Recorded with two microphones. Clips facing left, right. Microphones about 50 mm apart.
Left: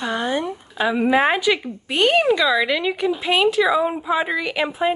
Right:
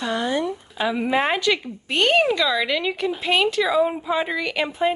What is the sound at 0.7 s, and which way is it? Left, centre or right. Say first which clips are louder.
A woman's voice: left 4 dB; centre.